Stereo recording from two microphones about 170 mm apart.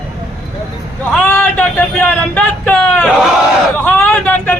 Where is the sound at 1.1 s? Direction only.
10° left (ahead or behind).